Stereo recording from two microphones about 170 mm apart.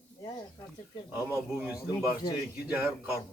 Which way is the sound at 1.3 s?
10° right (ahead or behind).